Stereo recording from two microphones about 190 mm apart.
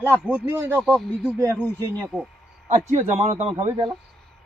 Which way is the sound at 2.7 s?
35° right (ahead or behind).